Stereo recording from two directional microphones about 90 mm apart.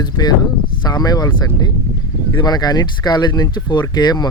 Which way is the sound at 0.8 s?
45° left (ahead or behind).